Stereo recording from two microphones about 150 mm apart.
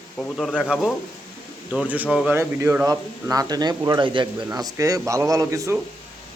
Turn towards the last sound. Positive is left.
turn(degrees=-20)  # may be behind; listen again after turning